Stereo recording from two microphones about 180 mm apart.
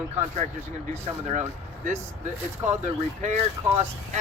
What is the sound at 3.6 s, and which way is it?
Speech, 20° right (ahead or behind).